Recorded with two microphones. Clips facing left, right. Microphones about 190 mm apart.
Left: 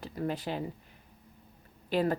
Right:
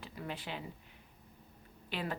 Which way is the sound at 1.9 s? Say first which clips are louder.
Left 11 dB; 40° left (ahead or behind).